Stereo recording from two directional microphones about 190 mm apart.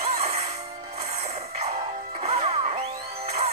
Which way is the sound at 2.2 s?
35° right (ahead or behind).